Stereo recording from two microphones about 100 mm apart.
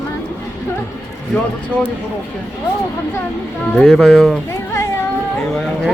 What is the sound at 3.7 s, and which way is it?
Speech, 5° left (ahead or behind).